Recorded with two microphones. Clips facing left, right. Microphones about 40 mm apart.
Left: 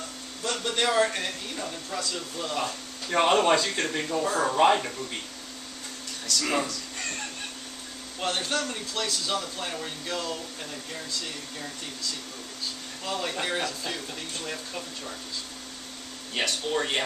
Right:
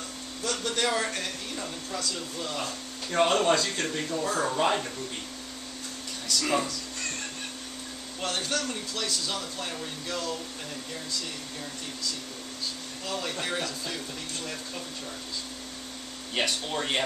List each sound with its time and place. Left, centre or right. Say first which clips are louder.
0.5 s a man's voice: left 2 dB; centre
4.3 s a man's voice: left 1 dB; centre
4.6 s speech: left 8 dB; left
6.4 s a man's voice: even; centre
8.2 s a man's voice: left 2 dB; centre
13.0 s a man's voice: left 2 dB; centre
16.3 s speech: even; centre